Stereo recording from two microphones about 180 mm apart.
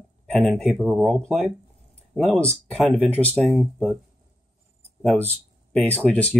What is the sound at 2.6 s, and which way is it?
Speech, 10° left (ahead or behind).